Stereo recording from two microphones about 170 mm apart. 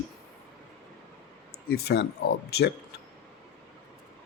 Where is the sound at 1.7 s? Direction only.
70° left (ahead or behind).